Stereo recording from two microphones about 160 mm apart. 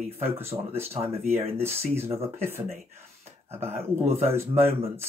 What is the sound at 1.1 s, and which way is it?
Speech, 40° right (ahead or behind).